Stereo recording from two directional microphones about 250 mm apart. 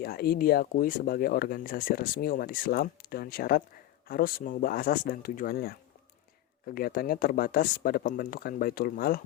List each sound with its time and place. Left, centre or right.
0.0 s speech: left